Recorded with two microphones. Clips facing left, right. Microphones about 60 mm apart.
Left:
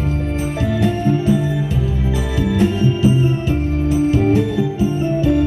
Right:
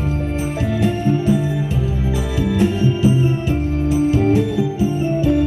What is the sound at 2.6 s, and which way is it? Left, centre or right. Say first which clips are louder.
Music: left 1 dB; left.